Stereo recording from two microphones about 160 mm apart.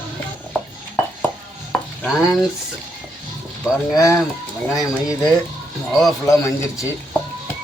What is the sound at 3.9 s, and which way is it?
Speech, 20° left (ahead or behind).